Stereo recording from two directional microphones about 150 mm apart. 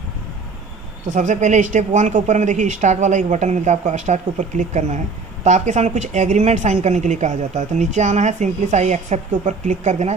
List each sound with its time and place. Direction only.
1.0 s speech: 55° right (ahead or behind)